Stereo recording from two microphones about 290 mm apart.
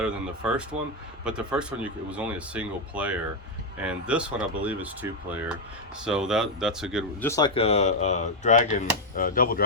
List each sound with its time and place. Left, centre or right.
0.0 s speech: centre
6.1 s speech: centre
7.3 s speech: centre; by 9.6 s left